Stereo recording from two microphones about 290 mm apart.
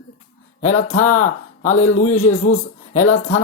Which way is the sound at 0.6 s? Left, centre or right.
Left.